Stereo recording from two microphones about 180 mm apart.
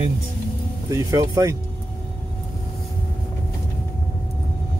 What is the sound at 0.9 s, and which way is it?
Speech, 20° right (ahead or behind).